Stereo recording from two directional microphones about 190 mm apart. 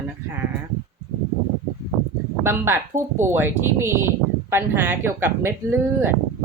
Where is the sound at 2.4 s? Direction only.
15° right (ahead or behind).